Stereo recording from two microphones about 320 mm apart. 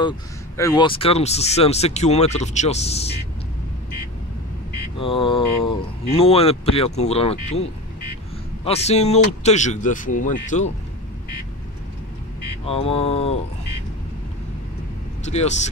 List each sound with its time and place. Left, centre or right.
0.6 s speech: centre
4.9 s speech: centre
8.6 s speech: centre
12.6 s speech: centre
15.2 s speech: left